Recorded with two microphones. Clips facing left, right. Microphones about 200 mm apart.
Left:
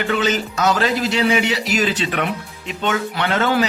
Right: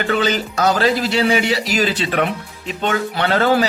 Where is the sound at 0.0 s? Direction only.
35° right (ahead or behind).